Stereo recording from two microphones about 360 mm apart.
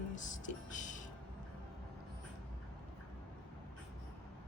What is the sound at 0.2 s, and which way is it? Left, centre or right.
Music, left.